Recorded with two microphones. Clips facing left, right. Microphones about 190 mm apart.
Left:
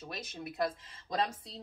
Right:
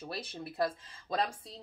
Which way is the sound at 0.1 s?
30° right (ahead or behind).